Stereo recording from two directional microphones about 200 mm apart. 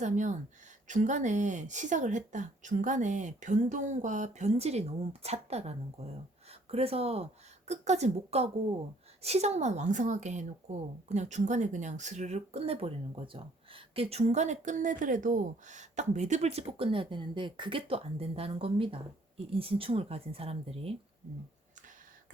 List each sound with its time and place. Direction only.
0.0 s a woman's voice: 35° right (ahead or behind)